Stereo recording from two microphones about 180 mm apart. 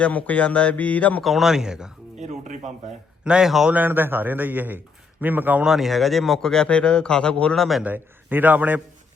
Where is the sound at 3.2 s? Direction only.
5° right (ahead or behind).